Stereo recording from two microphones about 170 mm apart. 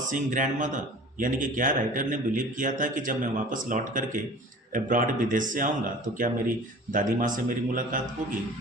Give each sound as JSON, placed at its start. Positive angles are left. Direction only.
{"t": 0.1, "sound": "a man's voice", "side_deg": -50}